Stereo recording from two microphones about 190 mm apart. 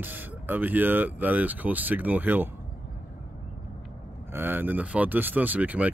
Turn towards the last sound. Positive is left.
turn(degrees=-10)  # may be behind; listen again after turning